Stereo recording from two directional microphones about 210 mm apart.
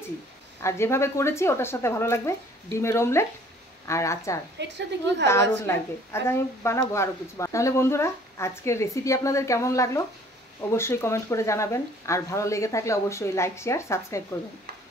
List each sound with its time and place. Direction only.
0.6 s a woman's voice: 10° left (ahead or behind)
4.6 s a woman's voice: 55° right (ahead or behind)
5.2 s a woman's voice: 10° left (ahead or behind)